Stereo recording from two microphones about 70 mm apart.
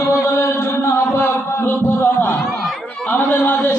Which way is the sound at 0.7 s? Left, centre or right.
Left.